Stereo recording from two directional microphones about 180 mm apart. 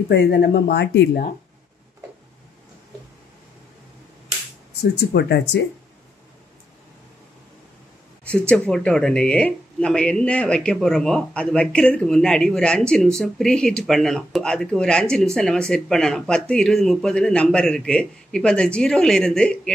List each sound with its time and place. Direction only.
0.1 s speech: 65° left (ahead or behind)
4.9 s speech: 70° left (ahead or behind)
8.3 s speech: 5° left (ahead or behind)